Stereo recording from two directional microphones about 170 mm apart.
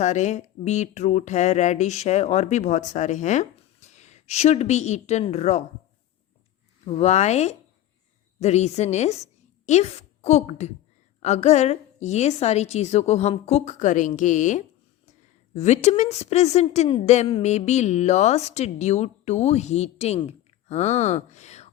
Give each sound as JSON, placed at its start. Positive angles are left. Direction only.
{"t": 0.0, "sound": "speech", "side_deg": 45}
{"t": 6.8, "sound": "a woman's voice", "side_deg": 40}